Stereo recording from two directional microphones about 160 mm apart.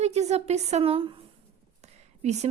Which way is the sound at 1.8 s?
45° right (ahead or behind).